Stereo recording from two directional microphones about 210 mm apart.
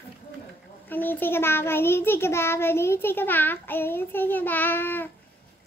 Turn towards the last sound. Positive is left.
turn(degrees=10)  # may be behind; listen again after turning